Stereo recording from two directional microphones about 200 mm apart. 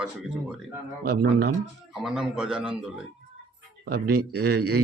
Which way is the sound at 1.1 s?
55° right (ahead or behind).